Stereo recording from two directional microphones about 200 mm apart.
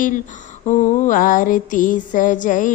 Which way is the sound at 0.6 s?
35° left (ahead or behind).